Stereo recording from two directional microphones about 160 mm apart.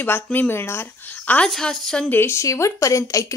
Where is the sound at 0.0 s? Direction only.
10° left (ahead or behind).